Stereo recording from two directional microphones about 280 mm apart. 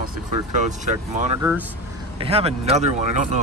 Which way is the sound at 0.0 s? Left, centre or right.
Right.